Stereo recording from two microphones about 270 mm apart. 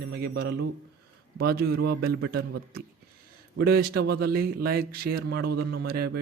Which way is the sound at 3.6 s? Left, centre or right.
Right.